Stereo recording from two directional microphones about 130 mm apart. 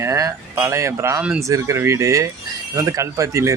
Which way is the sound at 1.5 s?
25° right (ahead or behind).